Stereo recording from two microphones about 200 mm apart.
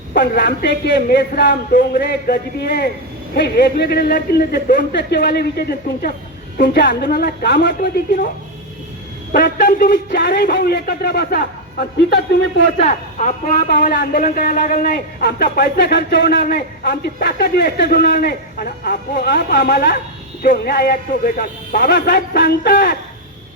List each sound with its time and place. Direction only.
0.2 s a man's voice: 60° left (ahead or behind)
9.3 s speech: 55° left (ahead or behind)
12.8 s a man's voice: 35° left (ahead or behind); by 23.0 s 55° left (ahead or behind)